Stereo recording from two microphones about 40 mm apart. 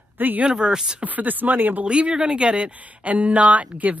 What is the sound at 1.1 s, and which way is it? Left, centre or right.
Speech, right.